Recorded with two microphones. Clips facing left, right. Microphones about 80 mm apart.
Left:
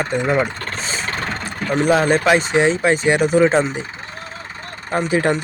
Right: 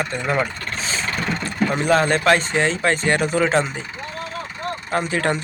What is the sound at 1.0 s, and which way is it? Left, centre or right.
Vehicle, left.